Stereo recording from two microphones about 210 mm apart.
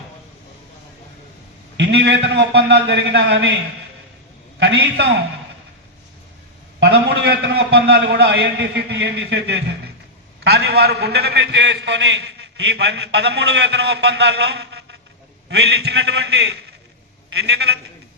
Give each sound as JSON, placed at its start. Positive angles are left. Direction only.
{"t": 1.7, "sound": "a man's voice", "side_deg": -55}
{"t": 4.6, "sound": "a man's voice", "side_deg": -55}
{"t": 6.7, "sound": "a man's voice", "side_deg": -55}